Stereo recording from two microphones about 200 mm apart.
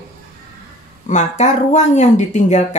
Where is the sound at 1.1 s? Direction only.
35° left (ahead or behind).